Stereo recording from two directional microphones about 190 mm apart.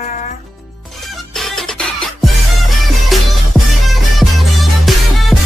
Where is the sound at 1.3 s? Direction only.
Centre (ahead or behind).